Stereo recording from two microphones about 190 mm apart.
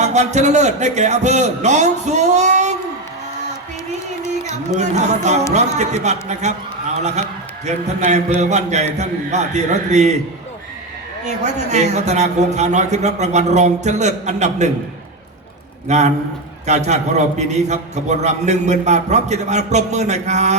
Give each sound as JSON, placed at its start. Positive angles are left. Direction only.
{"t": 0.0, "sound": "a man's voice", "side_deg": -35}
{"t": 4.8, "sound": "a man's voice", "side_deg": -35}
{"t": 11.3, "sound": "a man's voice", "side_deg": -40}
{"t": 15.9, "sound": "a man's voice", "side_deg": -35}